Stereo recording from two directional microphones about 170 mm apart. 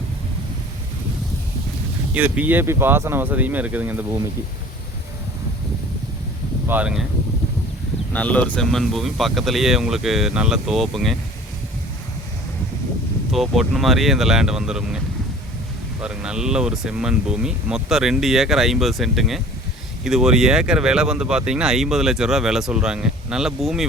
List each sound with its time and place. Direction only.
2.1 s speech: 10° right (ahead or behind)
6.7 s speech: 10° right (ahead or behind)
8.1 s speech: 10° left (ahead or behind)
13.3 s speech: centre (ahead or behind)